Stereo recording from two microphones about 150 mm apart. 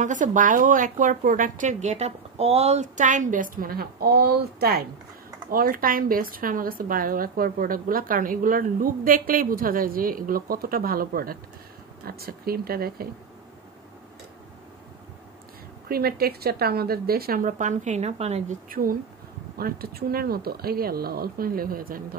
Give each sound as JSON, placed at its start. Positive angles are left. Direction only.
{"t": 0.0, "sound": "a woman's voice", "side_deg": -55}
{"t": 5.5, "sound": "a woman's voice", "side_deg": -70}
{"t": 12.0, "sound": "speech", "side_deg": -90}
{"t": 15.9, "sound": "speech", "side_deg": -90}
{"t": 18.7, "sound": "a woman's voice", "side_deg": -70}
{"t": 19.6, "sound": "speech", "side_deg": -90}